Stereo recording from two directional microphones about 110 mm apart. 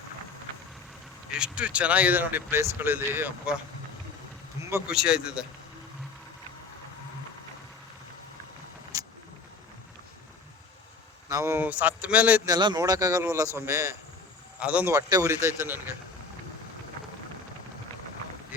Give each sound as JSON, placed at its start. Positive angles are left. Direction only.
{"t": 1.4, "sound": "speech", "side_deg": -10}
{"t": 4.9, "sound": "speech", "side_deg": -5}
{"t": 11.3, "sound": "speech", "side_deg": -30}
{"t": 11.5, "sound": "speech", "side_deg": -15}
{"t": 12.5, "sound": "speech", "side_deg": -40}
{"t": 14.6, "sound": "speech", "side_deg": -10}
{"t": 14.9, "sound": "speech", "side_deg": -30}